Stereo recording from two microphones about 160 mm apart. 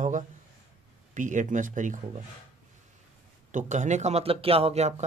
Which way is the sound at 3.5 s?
50° right (ahead or behind).